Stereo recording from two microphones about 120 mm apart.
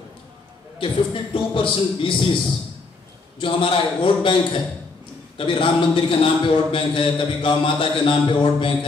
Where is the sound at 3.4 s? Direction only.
45° left (ahead or behind).